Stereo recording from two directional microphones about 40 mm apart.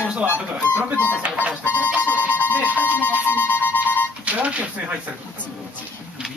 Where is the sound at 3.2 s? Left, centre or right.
Left.